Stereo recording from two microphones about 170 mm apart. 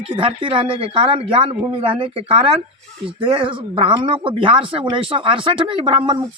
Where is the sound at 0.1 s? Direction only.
30° right (ahead or behind).